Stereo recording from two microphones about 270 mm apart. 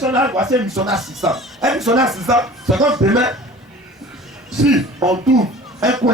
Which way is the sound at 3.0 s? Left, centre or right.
Centre.